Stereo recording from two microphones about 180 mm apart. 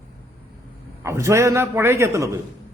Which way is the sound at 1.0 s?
15° right (ahead or behind).